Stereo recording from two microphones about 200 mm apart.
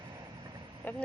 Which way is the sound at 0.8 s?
10° left (ahead or behind).